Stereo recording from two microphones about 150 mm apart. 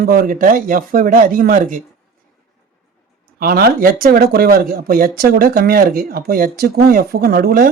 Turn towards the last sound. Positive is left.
turn(degrees=-85)